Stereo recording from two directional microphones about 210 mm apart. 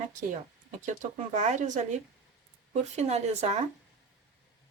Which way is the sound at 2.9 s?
30° right (ahead or behind).